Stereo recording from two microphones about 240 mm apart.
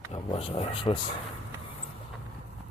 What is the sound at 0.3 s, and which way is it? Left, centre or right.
Speech, left.